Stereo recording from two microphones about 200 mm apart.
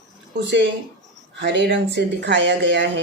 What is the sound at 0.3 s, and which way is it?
Speech, 60° right (ahead or behind).